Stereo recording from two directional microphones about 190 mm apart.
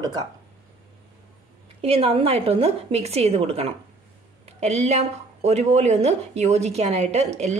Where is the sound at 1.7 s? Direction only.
30° right (ahead or behind).